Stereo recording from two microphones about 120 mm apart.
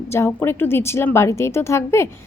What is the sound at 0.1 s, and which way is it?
A woman's voice, 20° left (ahead or behind).